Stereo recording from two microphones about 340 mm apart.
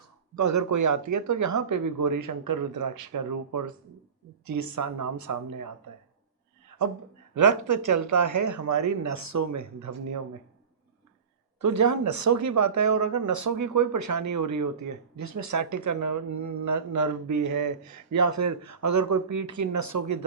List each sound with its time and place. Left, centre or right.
0.3 s speech: right
7.3 s speech: right
11.6 s speech: right